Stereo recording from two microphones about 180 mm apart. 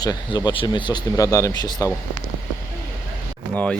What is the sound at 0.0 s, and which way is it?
Speech, 20° left (ahead or behind).